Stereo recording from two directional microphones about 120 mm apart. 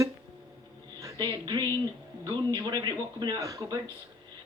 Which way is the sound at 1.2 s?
40° right (ahead or behind).